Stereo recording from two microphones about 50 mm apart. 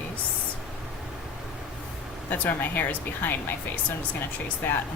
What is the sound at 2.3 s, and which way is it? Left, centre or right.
Speech, left.